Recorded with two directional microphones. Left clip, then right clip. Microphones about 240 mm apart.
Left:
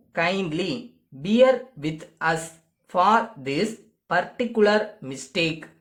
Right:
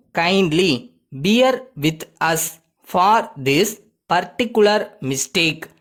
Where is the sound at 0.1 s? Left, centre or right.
Right.